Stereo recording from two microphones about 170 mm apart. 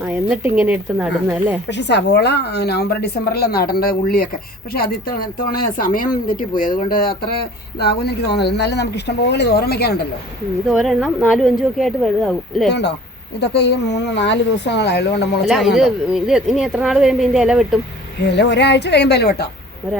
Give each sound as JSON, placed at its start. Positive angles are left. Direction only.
{"t": 0.0, "sound": "speech", "side_deg": -10}
{"t": 1.7, "sound": "a woman's voice", "side_deg": 90}
{"t": 7.8, "sound": "a woman's voice", "side_deg": 70}
{"t": 10.7, "sound": "a woman's voice", "side_deg": 0}
{"t": 13.4, "sound": "speech", "side_deg": 80}
{"t": 15.4, "sound": "a woman's voice", "side_deg": 0}
{"t": 18.2, "sound": "speech", "side_deg": 85}